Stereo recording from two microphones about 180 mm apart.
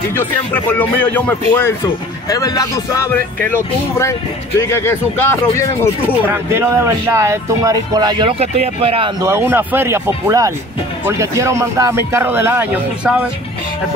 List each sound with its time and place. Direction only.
0.1 s speech: 10° left (ahead or behind)
2.2 s speech: 20° left (ahead or behind)
6.2 s speech: 10° right (ahead or behind)
8.3 s speech: 35° right (ahead or behind)
9.2 s speech: 15° right (ahead or behind)